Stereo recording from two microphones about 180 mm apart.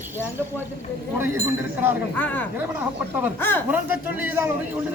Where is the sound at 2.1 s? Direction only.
10° left (ahead or behind).